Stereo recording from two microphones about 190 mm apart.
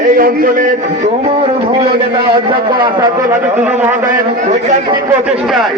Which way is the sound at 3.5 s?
5° right (ahead or behind).